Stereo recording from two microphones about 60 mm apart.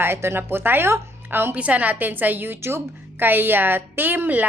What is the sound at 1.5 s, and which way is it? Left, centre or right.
A woman's voice, right.